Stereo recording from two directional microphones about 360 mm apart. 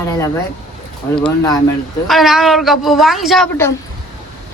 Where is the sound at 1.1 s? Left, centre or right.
Centre.